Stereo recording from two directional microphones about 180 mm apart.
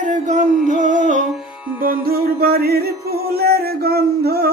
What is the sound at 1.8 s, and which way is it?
Music, 55° right (ahead or behind).